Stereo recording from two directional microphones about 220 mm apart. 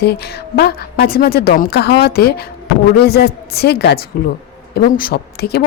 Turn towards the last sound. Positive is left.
turn(degrees=45)  # may be behind; listen again after turning